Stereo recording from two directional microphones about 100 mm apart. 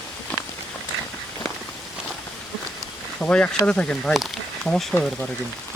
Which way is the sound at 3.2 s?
15° left (ahead or behind).